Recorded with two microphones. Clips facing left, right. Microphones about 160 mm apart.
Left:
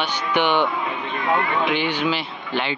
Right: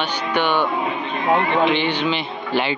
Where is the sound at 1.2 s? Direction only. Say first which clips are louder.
Right 4 dB; 30° right (ahead or behind).